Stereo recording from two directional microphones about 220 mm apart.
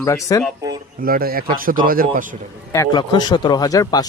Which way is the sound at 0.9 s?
40° right (ahead or behind).